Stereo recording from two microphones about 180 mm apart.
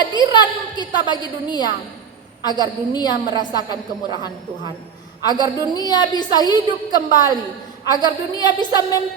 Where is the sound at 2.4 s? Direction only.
25° left (ahead or behind).